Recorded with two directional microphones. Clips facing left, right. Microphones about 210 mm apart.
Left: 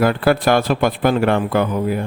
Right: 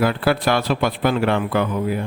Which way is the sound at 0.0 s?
45° left (ahead or behind).